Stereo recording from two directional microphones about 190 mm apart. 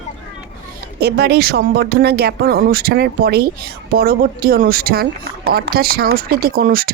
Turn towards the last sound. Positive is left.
turn(degrees=-50)  # may be behind; listen again after turning